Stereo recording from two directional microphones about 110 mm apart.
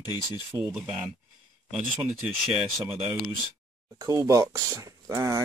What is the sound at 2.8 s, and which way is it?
Speech, 60° right (ahead or behind).